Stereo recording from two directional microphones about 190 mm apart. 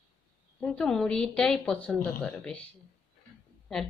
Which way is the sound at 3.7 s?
5° left (ahead or behind).